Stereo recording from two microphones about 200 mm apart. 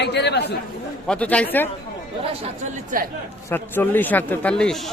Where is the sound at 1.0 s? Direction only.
5° left (ahead or behind).